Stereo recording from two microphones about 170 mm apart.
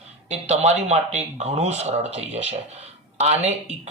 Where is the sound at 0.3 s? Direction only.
40° right (ahead or behind).